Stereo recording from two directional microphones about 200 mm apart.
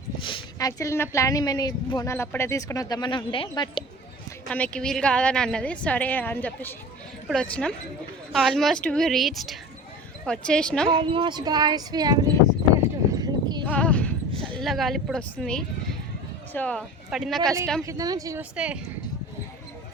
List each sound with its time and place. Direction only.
0.2 s speech: 25° left (ahead or behind)
4.4 s a woman's voice: 5° left (ahead or behind)
10.8 s speech: 25° right (ahead or behind)
13.1 s clip-clop: 20° right (ahead or behind)
13.7 s clip-clop: 5° left (ahead or behind)
14.4 s a woman's voice: 5° left (ahead or behind)
17.8 s speech: 15° right (ahead or behind)
18.5 s a woman's voice: 5° right (ahead or behind)